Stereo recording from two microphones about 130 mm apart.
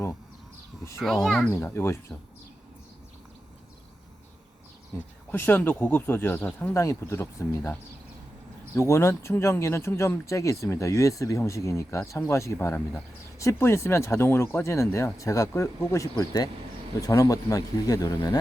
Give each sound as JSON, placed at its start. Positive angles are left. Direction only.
{"t": 1.0, "sound": "speech", "side_deg": 5}
{"t": 1.5, "sound": "speech", "side_deg": 20}
{"t": 5.3, "sound": "speech", "side_deg": 15}
{"t": 8.7, "sound": "speech", "side_deg": 20}